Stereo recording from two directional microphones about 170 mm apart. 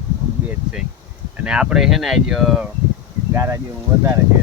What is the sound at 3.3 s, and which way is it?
Speech, 15° right (ahead or behind).